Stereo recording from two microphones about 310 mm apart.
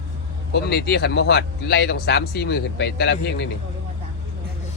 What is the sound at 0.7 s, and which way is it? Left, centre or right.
A man's voice, left.